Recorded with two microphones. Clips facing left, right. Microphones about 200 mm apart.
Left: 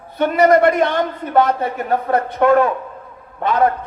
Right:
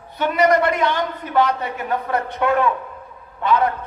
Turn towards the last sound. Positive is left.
turn(degrees=45)  # may be behind; listen again after turning